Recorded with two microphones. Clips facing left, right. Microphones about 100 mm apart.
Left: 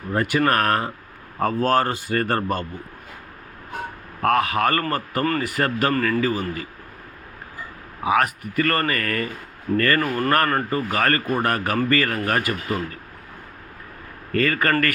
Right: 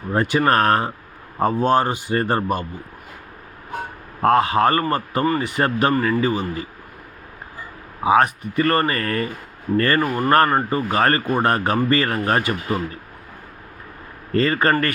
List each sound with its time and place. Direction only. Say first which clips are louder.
0.1 s speech: right 2 dB; 25° right (ahead or behind)
4.2 s speech: right 4 dB; 25° right (ahead or behind)
8.0 s speech: right 4 dB; 25° right (ahead or behind)
14.3 s speech: right 2 dB; 25° right (ahead or behind)